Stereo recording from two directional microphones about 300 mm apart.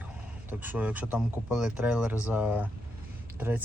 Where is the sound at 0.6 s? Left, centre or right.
Centre.